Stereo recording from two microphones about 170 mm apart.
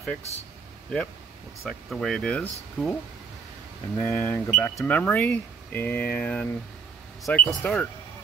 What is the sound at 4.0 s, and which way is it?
Speech, 15° left (ahead or behind).